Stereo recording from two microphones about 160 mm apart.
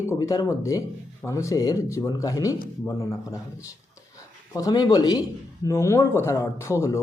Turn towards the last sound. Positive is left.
turn(degrees=20)  # may be behind; listen again after turning